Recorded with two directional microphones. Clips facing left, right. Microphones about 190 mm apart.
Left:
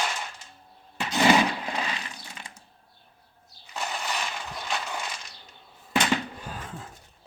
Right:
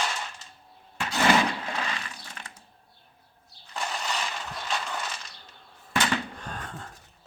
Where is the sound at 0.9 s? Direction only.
15° left (ahead or behind).